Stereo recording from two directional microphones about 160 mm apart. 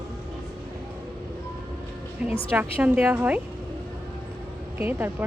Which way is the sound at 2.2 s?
5° right (ahead or behind).